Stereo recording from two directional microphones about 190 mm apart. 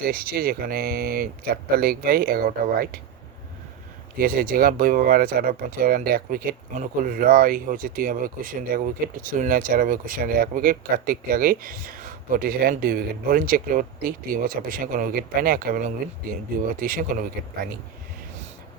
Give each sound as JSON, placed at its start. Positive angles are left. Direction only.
{"t": 0.0, "sound": "speech", "side_deg": -50}
{"t": 4.2, "sound": "speech", "side_deg": -50}